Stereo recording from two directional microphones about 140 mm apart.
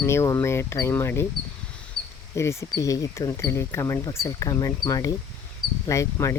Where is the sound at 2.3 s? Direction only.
20° left (ahead or behind).